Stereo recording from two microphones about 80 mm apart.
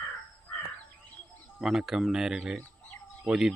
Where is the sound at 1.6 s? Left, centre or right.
Centre.